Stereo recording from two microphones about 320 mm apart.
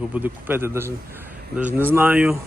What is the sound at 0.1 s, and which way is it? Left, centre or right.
A man's voice, centre.